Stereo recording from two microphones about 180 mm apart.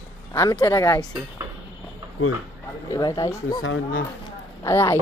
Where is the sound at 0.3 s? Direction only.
15° left (ahead or behind).